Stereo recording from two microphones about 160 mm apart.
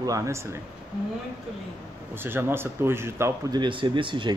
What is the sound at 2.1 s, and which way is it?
Speech, 15° right (ahead or behind).